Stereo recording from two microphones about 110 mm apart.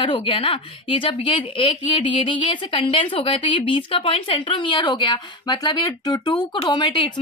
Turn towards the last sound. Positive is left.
turn(degrees=45)  # may be behind; listen again after turning